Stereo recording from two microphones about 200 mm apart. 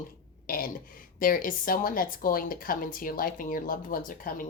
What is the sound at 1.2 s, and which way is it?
Speech, 45° left (ahead or behind).